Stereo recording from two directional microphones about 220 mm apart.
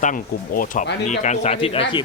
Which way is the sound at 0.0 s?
35° left (ahead or behind).